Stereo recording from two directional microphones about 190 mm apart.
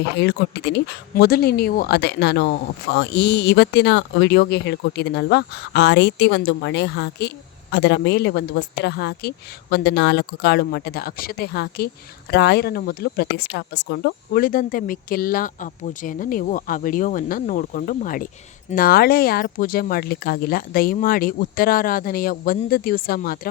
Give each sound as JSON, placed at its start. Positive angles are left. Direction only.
{"t": 0.2, "sound": "speech", "side_deg": 65}